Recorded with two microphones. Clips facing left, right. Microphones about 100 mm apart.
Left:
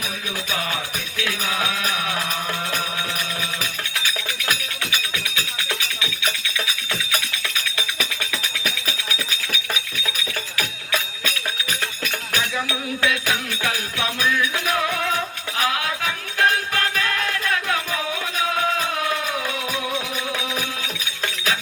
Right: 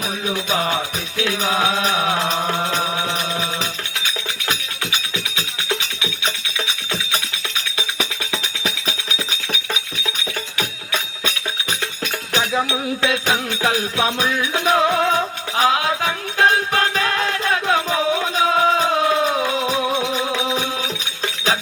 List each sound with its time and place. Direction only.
0.3 s music: 30° right (ahead or behind)
8.6 s music: 30° right (ahead or behind)